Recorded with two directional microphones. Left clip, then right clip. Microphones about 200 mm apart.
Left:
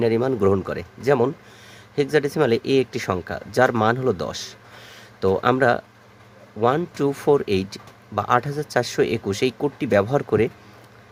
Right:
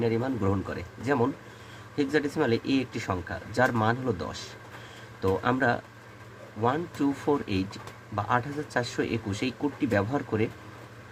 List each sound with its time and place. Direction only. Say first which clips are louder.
0.0 s speech: left 9 dB; 55° left (ahead or behind)